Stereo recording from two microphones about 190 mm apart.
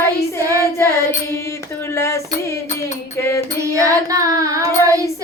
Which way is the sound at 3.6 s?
15° right (ahead or behind).